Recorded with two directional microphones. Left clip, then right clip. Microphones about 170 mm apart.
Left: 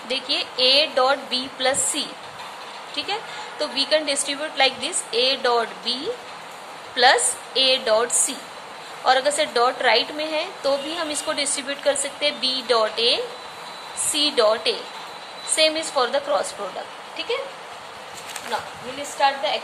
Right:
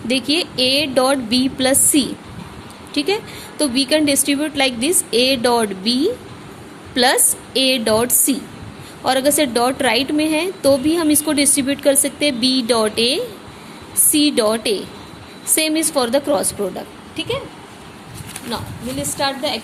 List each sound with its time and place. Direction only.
0.1 s a woman's voice: 45° right (ahead or behind)
19.2 s a woman's voice: 65° right (ahead or behind)